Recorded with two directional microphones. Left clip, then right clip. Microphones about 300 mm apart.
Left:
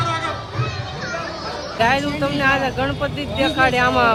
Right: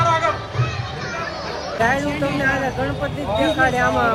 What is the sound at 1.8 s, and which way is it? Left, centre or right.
Speech, centre.